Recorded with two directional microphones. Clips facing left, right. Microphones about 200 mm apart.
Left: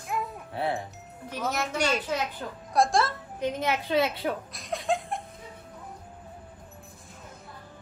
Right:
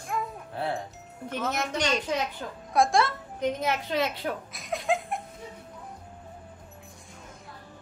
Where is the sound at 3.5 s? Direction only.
30° left (ahead or behind).